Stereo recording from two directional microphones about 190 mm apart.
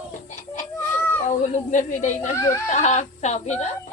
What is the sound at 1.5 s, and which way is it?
Speech, 40° left (ahead or behind).